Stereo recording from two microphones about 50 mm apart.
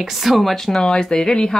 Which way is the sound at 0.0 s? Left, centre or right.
Centre.